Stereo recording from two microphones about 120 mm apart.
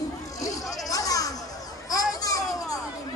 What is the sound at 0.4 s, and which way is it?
Music, 30° left (ahead or behind).